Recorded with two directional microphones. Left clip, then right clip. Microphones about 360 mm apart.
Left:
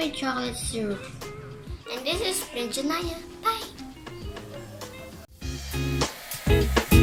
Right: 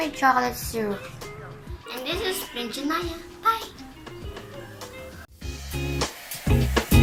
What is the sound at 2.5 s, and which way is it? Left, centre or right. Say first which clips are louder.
A child's voice: even; left.